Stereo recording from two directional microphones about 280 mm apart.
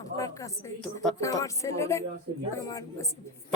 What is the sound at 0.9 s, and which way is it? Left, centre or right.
Speech, centre.